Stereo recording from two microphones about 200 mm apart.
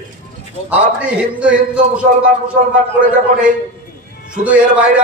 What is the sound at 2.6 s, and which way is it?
Speech, 40° right (ahead or behind).